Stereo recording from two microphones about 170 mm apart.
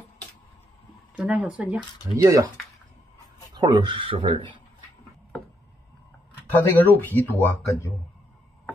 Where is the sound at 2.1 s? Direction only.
25° right (ahead or behind).